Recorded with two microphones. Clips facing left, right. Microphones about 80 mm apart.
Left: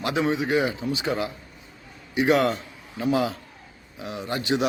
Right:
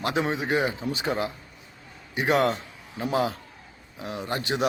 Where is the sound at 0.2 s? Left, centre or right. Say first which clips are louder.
Left 3 dB; right.